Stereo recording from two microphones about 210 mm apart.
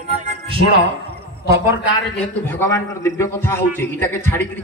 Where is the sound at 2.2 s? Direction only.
10° left (ahead or behind).